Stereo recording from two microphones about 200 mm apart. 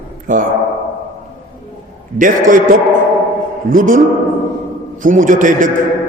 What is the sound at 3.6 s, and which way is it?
A man's voice, 45° right (ahead or behind).